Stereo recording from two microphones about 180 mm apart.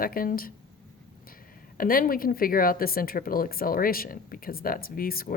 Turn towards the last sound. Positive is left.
turn(degrees=55)  # may be behind; listen again after turning